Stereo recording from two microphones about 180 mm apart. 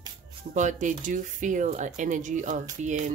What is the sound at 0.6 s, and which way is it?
Speech, 45° right (ahead or behind).